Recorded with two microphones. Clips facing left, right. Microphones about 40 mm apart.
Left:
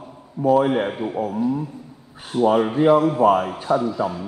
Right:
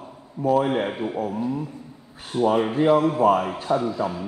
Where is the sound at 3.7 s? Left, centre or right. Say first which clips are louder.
Left 3 dB; left.